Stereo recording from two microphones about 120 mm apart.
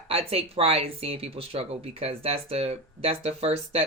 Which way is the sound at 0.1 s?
55° right (ahead or behind).